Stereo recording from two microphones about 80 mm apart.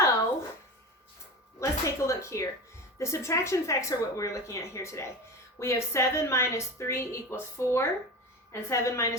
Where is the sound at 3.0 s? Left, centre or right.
Left.